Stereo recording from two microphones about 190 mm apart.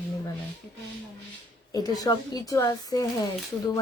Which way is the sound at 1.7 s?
20° left (ahead or behind).